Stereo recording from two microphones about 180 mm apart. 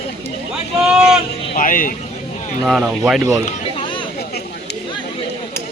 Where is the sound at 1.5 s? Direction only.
50° left (ahead or behind).